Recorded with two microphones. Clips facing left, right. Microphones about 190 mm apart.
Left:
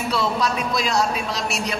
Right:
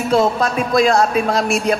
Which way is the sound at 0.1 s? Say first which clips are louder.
Right 8 dB; 50° right (ahead or behind).